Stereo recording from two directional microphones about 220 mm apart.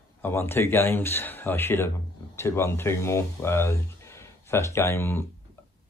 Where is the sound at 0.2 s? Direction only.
10° left (ahead or behind).